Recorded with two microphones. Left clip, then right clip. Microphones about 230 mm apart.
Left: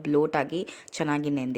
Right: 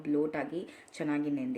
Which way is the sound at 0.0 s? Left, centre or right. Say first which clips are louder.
Left 8 dB; left.